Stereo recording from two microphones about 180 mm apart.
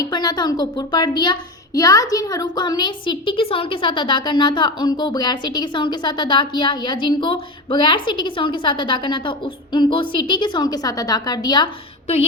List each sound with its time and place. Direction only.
0.0 s a child's voice: 20° left (ahead or behind)